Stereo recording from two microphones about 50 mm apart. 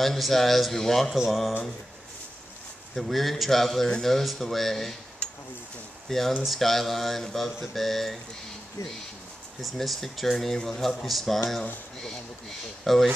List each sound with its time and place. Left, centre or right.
0.0 s mantra: centre
1.1 s mantra: centre
2.9 s mantra: centre
5.2 s a sound: left
6.0 s speech: centre
6.4 s mantra: centre
9.6 s mantra: centre
12.0 s speech: centre